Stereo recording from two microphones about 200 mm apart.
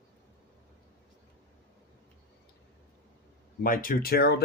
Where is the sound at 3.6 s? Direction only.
45° left (ahead or behind).